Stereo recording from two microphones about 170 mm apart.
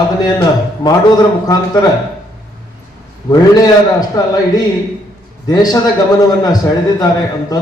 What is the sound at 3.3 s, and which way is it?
A man's voice, 20° left (ahead or behind).